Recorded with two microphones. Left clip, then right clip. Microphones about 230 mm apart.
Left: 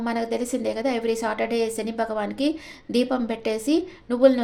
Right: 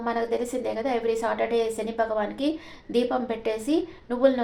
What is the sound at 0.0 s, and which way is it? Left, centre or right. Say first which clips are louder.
A woman's voice: even; left.